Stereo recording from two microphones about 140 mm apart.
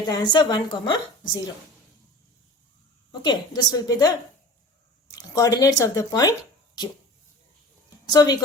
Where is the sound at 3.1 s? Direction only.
30° left (ahead or behind).